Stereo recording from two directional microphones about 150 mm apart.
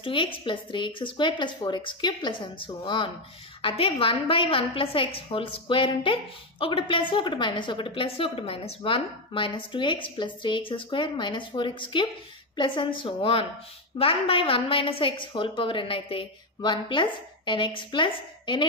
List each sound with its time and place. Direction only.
0.0 s a woman's voice: 35° left (ahead or behind)